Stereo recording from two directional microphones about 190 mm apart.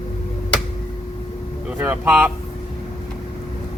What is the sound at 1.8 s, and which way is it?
Speech, 10° right (ahead or behind).